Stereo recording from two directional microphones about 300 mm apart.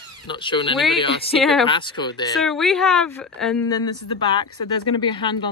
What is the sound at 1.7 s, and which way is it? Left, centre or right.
Speech, centre.